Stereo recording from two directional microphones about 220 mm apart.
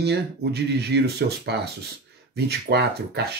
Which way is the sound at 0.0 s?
50° right (ahead or behind).